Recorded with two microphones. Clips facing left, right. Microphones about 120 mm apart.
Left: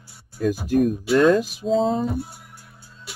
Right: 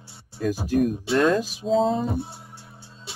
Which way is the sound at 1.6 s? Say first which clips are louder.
Even; centre (ahead or behind).